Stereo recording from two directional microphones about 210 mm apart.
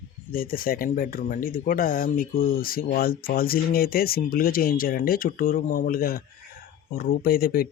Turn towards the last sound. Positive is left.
turn(degrees=45)  # may be behind; listen again after turning